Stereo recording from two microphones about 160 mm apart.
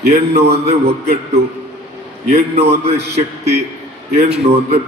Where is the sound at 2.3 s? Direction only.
40° right (ahead or behind).